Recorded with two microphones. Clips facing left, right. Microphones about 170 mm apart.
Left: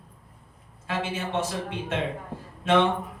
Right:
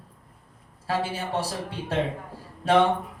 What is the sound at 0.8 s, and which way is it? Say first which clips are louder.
Speech: right 2 dB; 35° right (ahead or behind).